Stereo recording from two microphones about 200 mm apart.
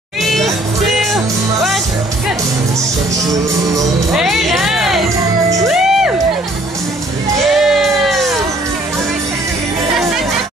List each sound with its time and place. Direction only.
0.2 s music: centre (ahead or behind)
4.1 s music: centre (ahead or behind)
5.1 s music: 15° right (ahead or behind)
5.7 s music: centre (ahead or behind)
7.4 s a sound: centre (ahead or behind)